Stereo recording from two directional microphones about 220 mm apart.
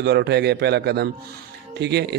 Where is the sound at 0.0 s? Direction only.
50° right (ahead or behind).